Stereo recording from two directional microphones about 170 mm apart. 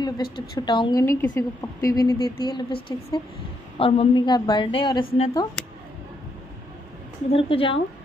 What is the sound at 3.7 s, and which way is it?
A woman's voice, 30° left (ahead or behind).